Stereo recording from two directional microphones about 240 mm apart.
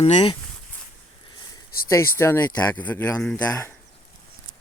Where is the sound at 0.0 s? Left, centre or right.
Left.